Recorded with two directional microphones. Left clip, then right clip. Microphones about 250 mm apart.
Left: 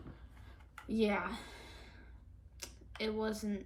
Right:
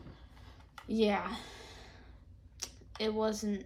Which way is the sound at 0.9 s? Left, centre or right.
Centre.